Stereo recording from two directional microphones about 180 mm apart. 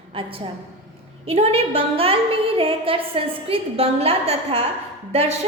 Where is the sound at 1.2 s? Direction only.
35° right (ahead or behind).